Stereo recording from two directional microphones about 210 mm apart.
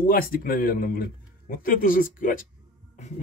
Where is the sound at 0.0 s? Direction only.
40° left (ahead or behind).